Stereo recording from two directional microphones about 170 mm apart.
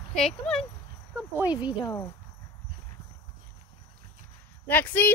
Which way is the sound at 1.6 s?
25° left (ahead or behind).